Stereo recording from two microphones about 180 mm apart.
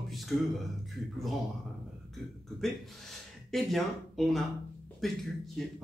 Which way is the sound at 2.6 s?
Centre (ahead or behind).